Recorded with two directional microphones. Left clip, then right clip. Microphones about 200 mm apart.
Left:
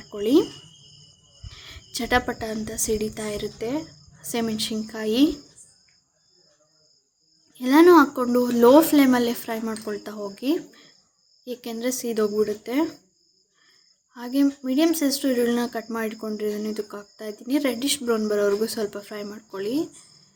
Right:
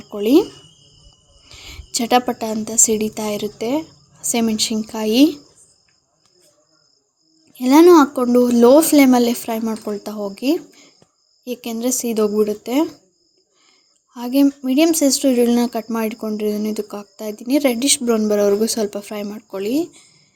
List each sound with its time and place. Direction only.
0.1 s speech: 30° right (ahead or behind)
1.5 s a woman's voice: 30° right (ahead or behind)
7.5 s speech: 25° right (ahead or behind)
14.1 s speech: 30° right (ahead or behind)